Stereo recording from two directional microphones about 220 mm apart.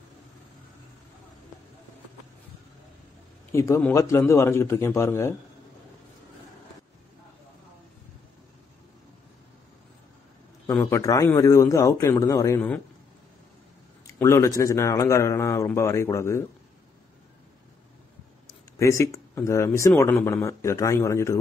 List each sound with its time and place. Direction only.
3.5 s speech: 15° left (ahead or behind)
10.7 s speech: 15° left (ahead or behind)
14.0 s speech: 15° left (ahead or behind)
18.8 s speech: 15° left (ahead or behind)